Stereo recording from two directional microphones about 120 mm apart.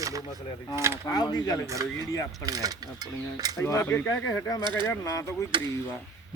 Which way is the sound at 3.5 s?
20° left (ahead or behind).